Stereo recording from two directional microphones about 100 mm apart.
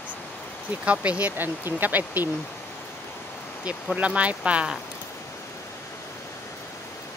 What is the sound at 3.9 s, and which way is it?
Speech, 15° right (ahead or behind).